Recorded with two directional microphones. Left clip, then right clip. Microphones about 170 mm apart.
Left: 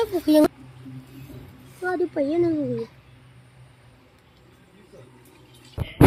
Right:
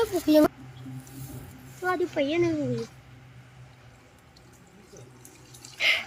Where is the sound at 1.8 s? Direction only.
30° left (ahead or behind).